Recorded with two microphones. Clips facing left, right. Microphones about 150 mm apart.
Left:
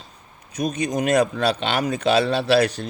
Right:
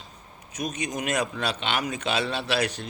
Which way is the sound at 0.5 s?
35° left (ahead or behind).